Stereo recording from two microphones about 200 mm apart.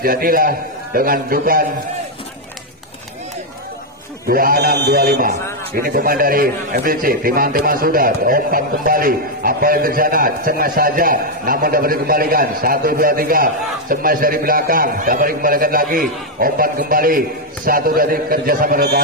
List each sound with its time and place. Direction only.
0.0 s a man's voice: 45° right (ahead or behind)
4.3 s a man's voice: 45° right (ahead or behind)